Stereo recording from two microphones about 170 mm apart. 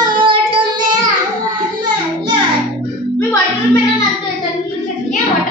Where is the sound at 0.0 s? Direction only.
30° right (ahead or behind).